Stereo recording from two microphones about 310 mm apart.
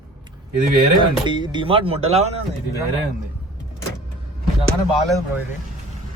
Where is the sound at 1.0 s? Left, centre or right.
Centre.